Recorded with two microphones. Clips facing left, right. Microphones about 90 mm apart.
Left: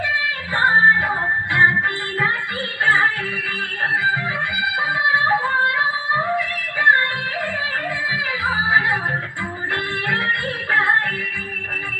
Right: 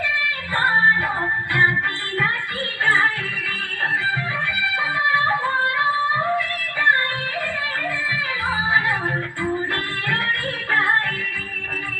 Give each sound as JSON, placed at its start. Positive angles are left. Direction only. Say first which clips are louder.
{"t": 0.5, "sound": "music", "louder": "left 3 dB", "side_deg": 20}
{"t": 2.8, "sound": "music", "louder": "left 2 dB", "side_deg": 15}
{"t": 4.7, "sound": "yodeling", "louder": "left 1 dB", "side_deg": 15}
{"t": 8.1, "sound": "music", "louder": "left 3 dB", "side_deg": 20}